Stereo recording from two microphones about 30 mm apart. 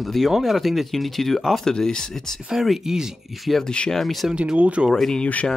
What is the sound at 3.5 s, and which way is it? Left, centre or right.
Speech, centre.